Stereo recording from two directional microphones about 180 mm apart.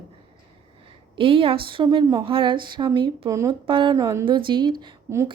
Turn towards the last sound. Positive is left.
turn(degrees=-20)  # may be behind; listen again after turning